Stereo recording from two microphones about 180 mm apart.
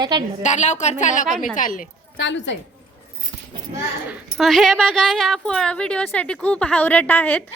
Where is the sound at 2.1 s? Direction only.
90° left.